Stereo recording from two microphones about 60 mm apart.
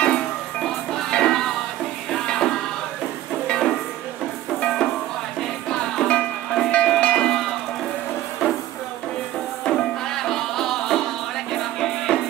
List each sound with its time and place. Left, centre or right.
0.6 s music: centre
3.4 s a sound: centre
4.6 s music: centre
9.7 s music: centre